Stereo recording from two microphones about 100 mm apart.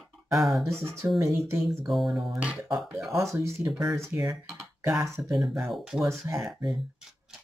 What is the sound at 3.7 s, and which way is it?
Speech, 10° right (ahead or behind).